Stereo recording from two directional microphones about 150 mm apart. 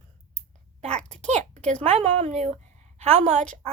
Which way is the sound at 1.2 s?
50° right (ahead or behind).